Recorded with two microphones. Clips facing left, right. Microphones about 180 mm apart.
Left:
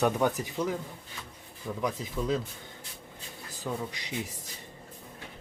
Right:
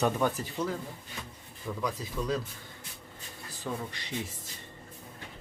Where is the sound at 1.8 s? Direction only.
20° left (ahead or behind).